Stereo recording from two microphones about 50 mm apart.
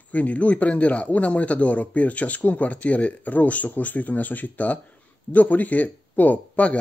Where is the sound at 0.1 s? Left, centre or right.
Left.